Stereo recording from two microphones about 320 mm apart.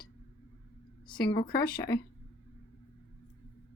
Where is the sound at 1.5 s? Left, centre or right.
Left.